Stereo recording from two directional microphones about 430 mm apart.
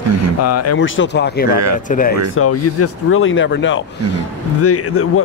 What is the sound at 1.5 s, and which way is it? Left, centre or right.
Speech, right.